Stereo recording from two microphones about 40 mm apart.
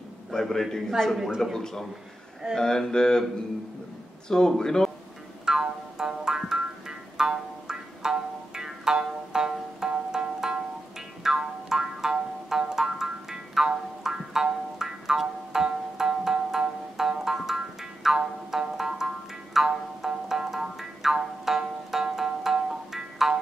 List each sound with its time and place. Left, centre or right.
0.3 s a man's voice: centre
4.3 s a man's voice: centre
5.4 s music: centre